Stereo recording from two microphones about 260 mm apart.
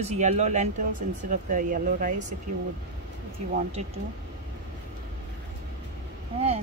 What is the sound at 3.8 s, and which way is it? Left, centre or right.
Speech, right.